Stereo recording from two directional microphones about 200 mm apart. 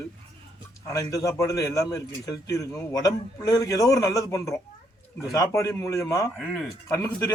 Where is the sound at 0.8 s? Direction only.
15° left (ahead or behind).